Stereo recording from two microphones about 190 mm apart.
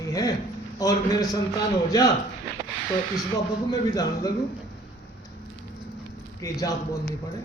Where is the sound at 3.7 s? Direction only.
20° left (ahead or behind).